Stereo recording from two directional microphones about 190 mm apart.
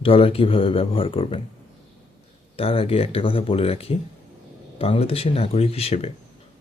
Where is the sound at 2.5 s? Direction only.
30° left (ahead or behind).